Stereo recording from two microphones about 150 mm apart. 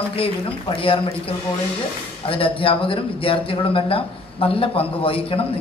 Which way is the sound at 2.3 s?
35° left (ahead or behind).